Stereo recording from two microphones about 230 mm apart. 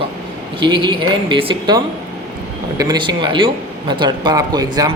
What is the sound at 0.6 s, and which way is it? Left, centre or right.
Speech, right.